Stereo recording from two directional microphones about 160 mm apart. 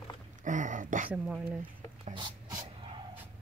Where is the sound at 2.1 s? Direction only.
25° right (ahead or behind).